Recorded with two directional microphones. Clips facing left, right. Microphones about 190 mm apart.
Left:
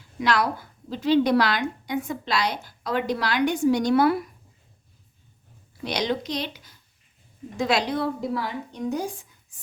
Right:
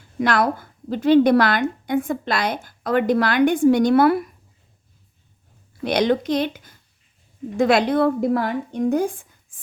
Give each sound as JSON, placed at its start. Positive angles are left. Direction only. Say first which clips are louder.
{"t": 0.2, "sound": "a woman's voice", "louder": "right 4 dB", "side_deg": -50}
{"t": 5.8, "sound": "a woman's voice", "louder": "right 7 dB", "side_deg": -55}